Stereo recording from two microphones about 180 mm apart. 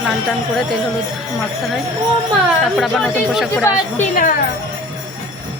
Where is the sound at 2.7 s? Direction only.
Centre (ahead or behind).